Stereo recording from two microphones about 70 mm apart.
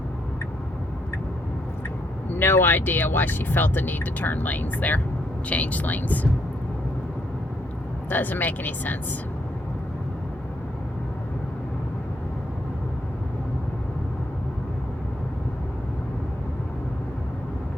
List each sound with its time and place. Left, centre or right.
2.4 s speech: left
8.1 s speech: left